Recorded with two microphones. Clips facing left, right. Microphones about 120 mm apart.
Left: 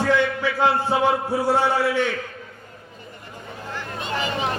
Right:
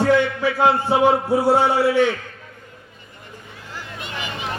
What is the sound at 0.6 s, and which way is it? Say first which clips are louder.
A man's voice: right 3 dB; 15° right (ahead or behind).